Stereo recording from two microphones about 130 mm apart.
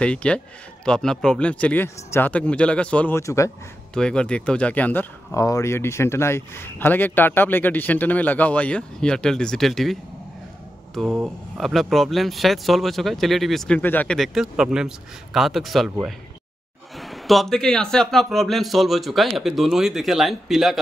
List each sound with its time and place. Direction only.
0.0 s speech: 10° left (ahead or behind)
3.2 s speech: 25° left (ahead or behind)
3.9 s speech: 5° left (ahead or behind)
5.3 s speech: 25° left (ahead or behind); by 9.9 s centre (ahead or behind)
11.2 s a man's voice: centre (ahead or behind)
13.7 s speech: 15° left (ahead or behind)
14.1 s a man's voice: centre (ahead or behind)